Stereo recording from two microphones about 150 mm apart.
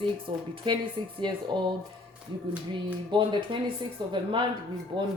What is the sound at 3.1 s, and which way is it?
Speech, 30° right (ahead or behind).